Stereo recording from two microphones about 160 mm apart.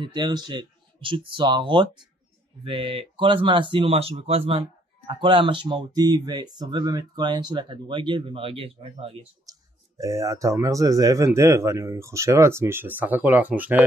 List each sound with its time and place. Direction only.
0.0 s speech: 30° right (ahead or behind)
9.5 s speech: 20° right (ahead or behind)